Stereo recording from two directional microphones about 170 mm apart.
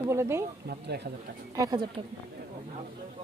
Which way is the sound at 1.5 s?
20° right (ahead or behind).